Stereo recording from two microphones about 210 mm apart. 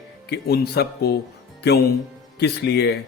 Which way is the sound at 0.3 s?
50° left (ahead or behind).